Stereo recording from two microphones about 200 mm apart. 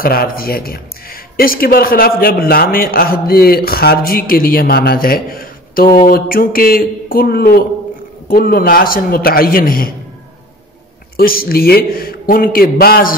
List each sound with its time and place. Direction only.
0.0 s speech: 50° left (ahead or behind)
11.1 s speech: 50° left (ahead or behind)